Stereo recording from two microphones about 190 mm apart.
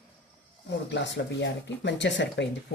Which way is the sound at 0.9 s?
70° left (ahead or behind).